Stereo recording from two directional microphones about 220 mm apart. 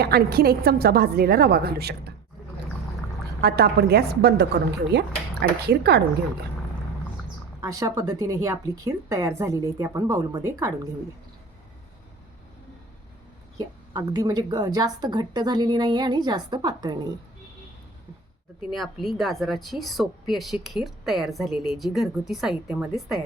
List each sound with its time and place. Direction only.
0.0 s a woman's voice: 45° right (ahead or behind)
3.4 s a woman's voice: 45° right (ahead or behind)
7.6 s a woman's voice: 15° right (ahead or behind)
13.6 s a woman's voice: 15° right (ahead or behind)
18.7 s a woman's voice: centre (ahead or behind)